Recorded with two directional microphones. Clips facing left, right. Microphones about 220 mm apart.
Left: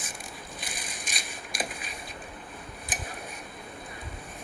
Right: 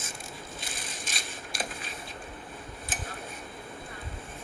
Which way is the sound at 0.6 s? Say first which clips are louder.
Even; 15° left (ahead or behind).